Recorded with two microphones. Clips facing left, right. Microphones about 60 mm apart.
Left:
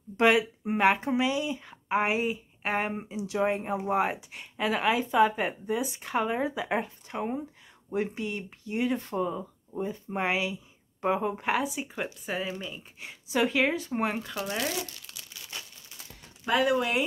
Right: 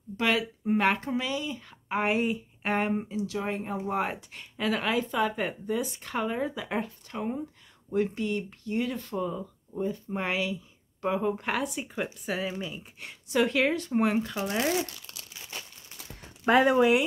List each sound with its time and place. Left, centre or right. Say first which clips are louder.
0.2 s speech: left 5 dB; centre
3.1 s speech: left 3 dB; centre
11.3 s speech: left 2 dB; centre
14.3 s speech: right 2 dB; centre
14.6 s speech: right 7 dB; right
16.4 s speech: right 4 dB; right